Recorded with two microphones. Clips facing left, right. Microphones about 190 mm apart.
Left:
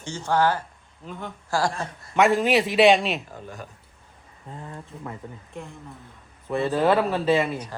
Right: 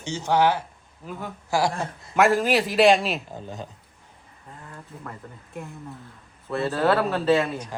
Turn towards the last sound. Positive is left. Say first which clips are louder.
# right 1 dB
turn(degrees=10)  # may be behind; listen again after turning